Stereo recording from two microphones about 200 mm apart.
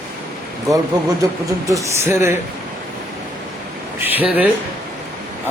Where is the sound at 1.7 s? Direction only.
15° right (ahead or behind).